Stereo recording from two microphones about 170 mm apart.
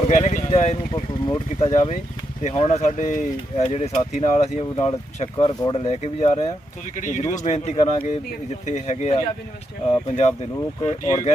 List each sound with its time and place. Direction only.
0.1 s speech: 45° left (ahead or behind)